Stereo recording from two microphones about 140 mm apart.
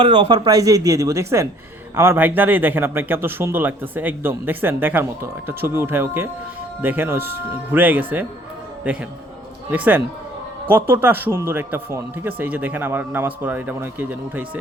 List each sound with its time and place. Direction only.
0.0 s speech: 35° right (ahead or behind); by 14.6 s 15° right (ahead or behind)